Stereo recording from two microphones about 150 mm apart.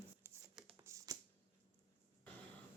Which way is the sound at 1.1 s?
25° right (ahead or behind).